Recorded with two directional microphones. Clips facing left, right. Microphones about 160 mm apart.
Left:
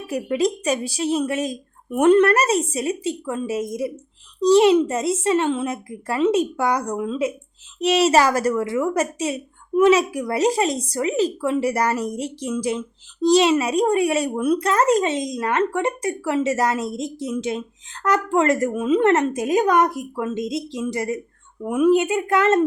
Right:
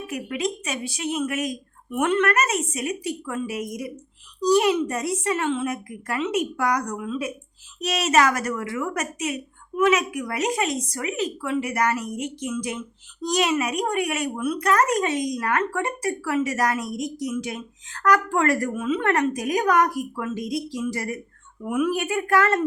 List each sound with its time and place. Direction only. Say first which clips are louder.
0.1 s a woman's voice: left 7 dB; 35° left (ahead or behind)
14.7 s speech: even; 25° left (ahead or behind)
18.7 s speech: left 6 dB; 35° left (ahead or behind)